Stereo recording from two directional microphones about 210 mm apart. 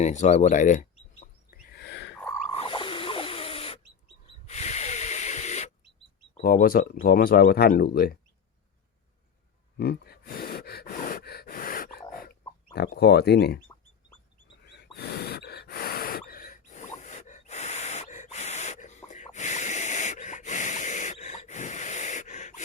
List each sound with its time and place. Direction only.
0.0 s bird: 35° left (ahead or behind)
1.8 s a sound: 55° left (ahead or behind)
2.5 s a sound: 25° left (ahead or behind)
4.4 s snort: 30° left (ahead or behind)
6.4 s speech: 45° left (ahead or behind)
9.7 s gasp: 50° left (ahead or behind)
14.6 s gasp: 50° left (ahead or behind); by 22.6 s 35° left (ahead or behind)